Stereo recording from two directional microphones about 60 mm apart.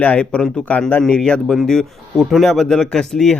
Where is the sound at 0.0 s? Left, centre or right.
Left.